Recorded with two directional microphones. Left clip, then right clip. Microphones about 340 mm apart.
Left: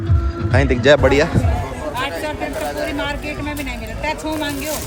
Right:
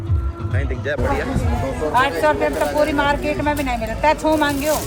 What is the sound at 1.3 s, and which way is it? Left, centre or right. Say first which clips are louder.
Speech: even; centre.